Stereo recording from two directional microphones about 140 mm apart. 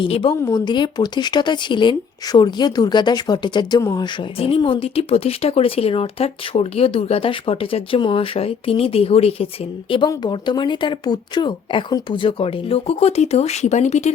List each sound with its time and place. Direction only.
0.0 s speech: 35° left (ahead or behind)
4.4 s speech: 40° left (ahead or behind)
10.1 s speech: 30° left (ahead or behind); by 14.1 s 55° left (ahead or behind)